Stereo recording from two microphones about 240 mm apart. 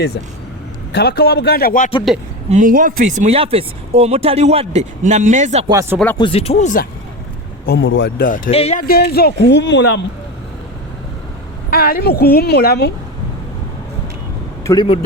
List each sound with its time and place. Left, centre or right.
0.9 s a woman's voice: left
2.5 s speech: right
6.1 s speech: left
7.7 s speech: left
8.4 s speech: left
8.9 s speech: left
11.7 s a woman's voice: left
14.6 s speech: centre